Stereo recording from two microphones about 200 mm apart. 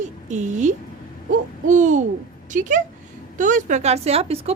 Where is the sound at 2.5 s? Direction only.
40° right (ahead or behind).